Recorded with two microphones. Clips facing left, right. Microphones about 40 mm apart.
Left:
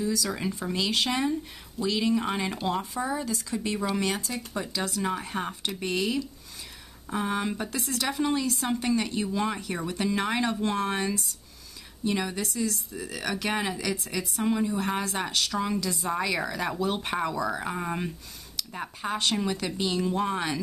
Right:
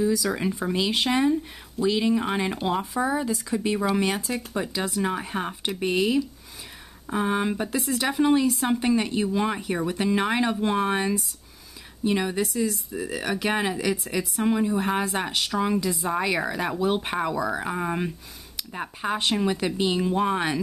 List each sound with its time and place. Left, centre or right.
0.0 s speech: centre